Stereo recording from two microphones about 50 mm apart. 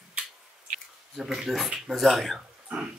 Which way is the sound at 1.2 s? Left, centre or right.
Centre.